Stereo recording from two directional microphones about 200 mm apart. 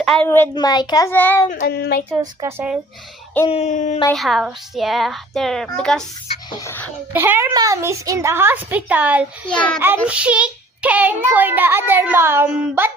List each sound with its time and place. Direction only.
0.0 s a child's voice: centre (ahead or behind)
1.5 s child singing: 45° left (ahead or behind)
2.0 s a child's voice: 10° right (ahead or behind)
3.5 s a sound: 35° left (ahead or behind)
4.1 s a woman's voice: centre (ahead or behind)
7.1 s a child's voice: 10° right (ahead or behind)